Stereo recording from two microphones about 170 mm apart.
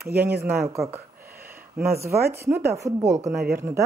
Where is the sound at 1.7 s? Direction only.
15° right (ahead or behind).